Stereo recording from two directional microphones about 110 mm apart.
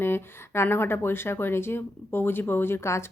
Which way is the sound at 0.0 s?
20° left (ahead or behind).